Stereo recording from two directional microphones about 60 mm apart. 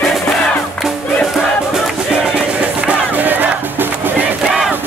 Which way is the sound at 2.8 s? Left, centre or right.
Right.